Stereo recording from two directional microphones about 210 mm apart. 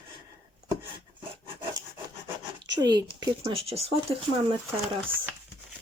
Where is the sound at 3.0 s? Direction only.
20° right (ahead or behind).